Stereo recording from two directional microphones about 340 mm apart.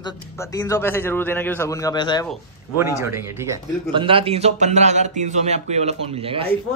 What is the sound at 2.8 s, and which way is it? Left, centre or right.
A man's voice, centre.